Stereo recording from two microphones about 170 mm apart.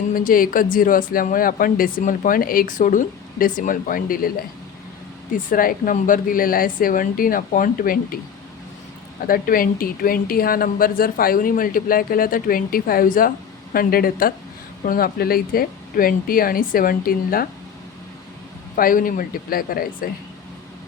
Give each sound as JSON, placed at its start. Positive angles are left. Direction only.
{"t": 0.1, "sound": "speech", "side_deg": 55}
{"t": 9.2, "sound": "speech", "side_deg": 55}
{"t": 18.8, "sound": "speech", "side_deg": 55}